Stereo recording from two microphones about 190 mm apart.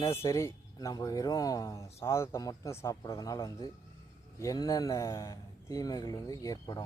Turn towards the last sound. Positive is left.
turn(degrees=20)  # may be behind; listen again after turning